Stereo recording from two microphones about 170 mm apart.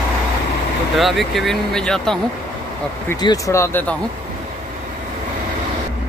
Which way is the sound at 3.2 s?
20° left (ahead or behind).